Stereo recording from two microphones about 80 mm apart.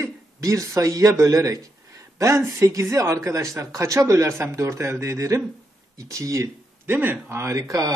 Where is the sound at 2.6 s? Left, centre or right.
Right.